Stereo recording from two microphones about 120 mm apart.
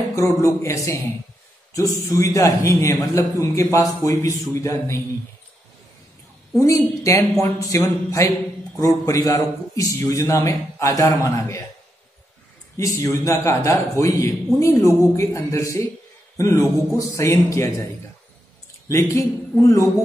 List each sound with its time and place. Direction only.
0.1 s a man's voice: 25° left (ahead or behind)
6.6 s a man's voice: 25° left (ahead or behind)
12.7 s a man's voice: 25° left (ahead or behind)
18.9 s a man's voice: 25° left (ahead or behind)